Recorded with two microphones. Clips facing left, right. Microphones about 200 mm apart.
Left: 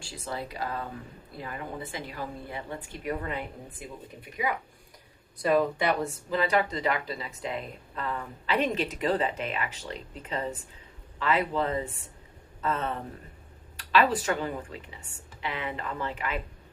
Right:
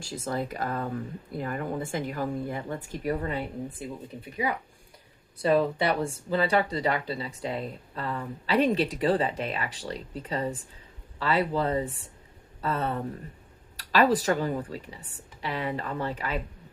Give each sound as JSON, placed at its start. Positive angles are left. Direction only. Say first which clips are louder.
{"t": 0.0, "sound": "a woman's voice", "louder": "right 5 dB", "side_deg": -45}
{"t": 5.4, "sound": "speech", "louder": "right 1 dB", "side_deg": -30}